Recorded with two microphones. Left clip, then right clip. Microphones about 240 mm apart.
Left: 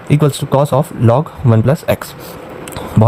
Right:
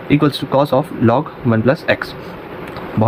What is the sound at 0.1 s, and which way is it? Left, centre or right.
Speech, left.